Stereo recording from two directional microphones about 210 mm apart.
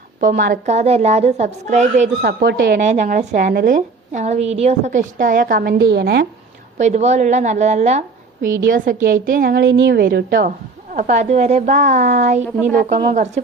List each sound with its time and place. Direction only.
0.2 s a woman's voice: 40° right (ahead or behind)
2.2 s a woman's voice: 50° right (ahead or behind)
2.8 s a woman's voice: 35° right (ahead or behind); by 6.2 s 50° right (ahead or behind)
6.7 s a woman's voice: 35° right (ahead or behind)